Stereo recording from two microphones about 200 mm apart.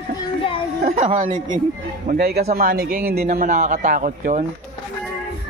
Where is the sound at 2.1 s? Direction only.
50° right (ahead or behind).